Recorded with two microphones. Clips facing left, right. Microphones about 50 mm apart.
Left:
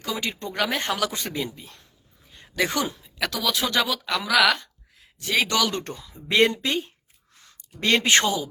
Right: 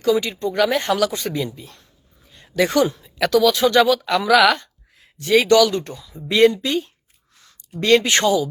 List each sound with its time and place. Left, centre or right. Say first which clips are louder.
0.2 s speech: right 7 dB; left
0.5 s speech: right 8 dB; centre
2.3 s speech: right 7 dB; centre
5.7 s speech: right 5 dB; left
6.2 s speech: right 5 dB; left